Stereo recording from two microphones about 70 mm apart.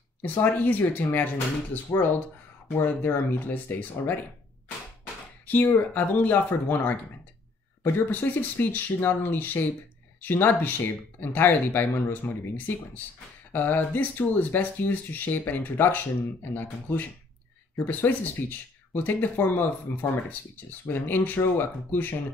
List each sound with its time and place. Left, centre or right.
0.2 s speech: left
5.5 s speech: left